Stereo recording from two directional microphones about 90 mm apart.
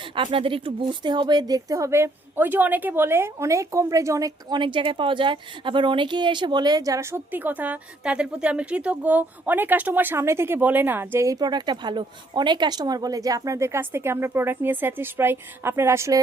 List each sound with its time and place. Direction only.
0.2 s speech: 75° right (ahead or behind); by 4.3 s 35° right (ahead or behind)
4.4 s speech: 60° right (ahead or behind); by 7.1 s 40° right (ahead or behind)
7.1 s speech: 20° right (ahead or behind)
11.3 s speech: 50° right (ahead or behind); by 16.2 s 35° right (ahead or behind)